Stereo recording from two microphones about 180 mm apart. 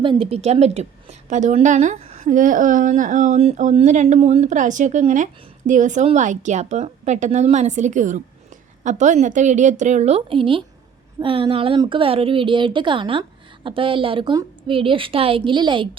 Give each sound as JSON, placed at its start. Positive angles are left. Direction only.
{"t": 0.0, "sound": "a woman's voice", "side_deg": -30}